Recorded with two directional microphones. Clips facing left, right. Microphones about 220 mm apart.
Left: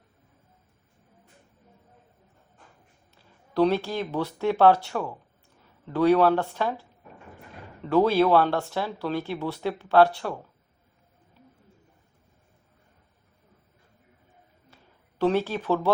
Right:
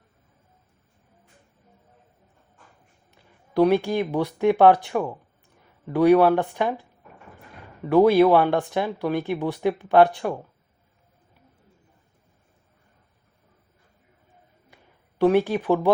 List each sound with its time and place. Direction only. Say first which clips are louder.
3.2 s speech: right 3 dB; 15° right (ahead or behind)
7.9 s speech: right 5 dB; 15° right (ahead or behind)
14.7 s a sound: right 2 dB; 15° right (ahead or behind)
15.2 s speech: right 5 dB; 15° right (ahead or behind)